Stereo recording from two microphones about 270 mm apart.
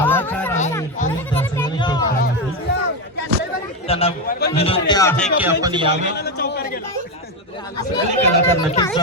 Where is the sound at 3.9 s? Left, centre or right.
Left.